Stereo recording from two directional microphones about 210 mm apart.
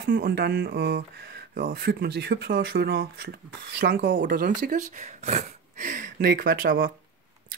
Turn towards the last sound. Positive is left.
turn(degrees=-45)  # may be behind; listen again after turning